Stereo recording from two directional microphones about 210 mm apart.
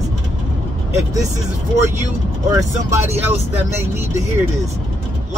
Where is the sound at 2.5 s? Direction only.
15° right (ahead or behind).